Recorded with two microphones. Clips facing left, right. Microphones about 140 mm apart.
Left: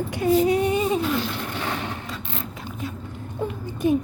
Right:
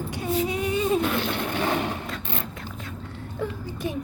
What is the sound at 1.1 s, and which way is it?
Speech, 60° right (ahead or behind).